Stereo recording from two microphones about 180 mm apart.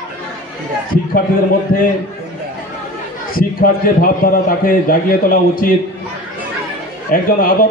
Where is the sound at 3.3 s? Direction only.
55° left (ahead or behind).